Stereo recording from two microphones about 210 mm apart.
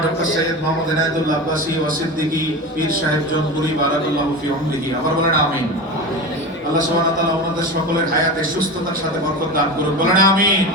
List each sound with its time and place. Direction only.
10.0 s a man's voice: 40° right (ahead or behind)